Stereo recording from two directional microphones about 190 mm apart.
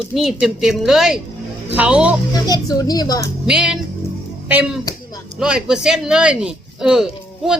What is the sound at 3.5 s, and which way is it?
Speech, 5° right (ahead or behind).